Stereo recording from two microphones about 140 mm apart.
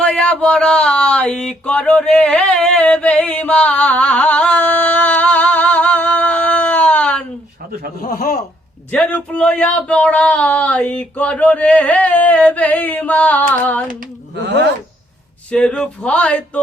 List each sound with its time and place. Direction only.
0.0 s a sound: 10° left (ahead or behind)
8.0 s a man's voice: 75° left (ahead or behind)
8.9 s speech: 10° left (ahead or behind)
15.5 s speech: 5° left (ahead or behind)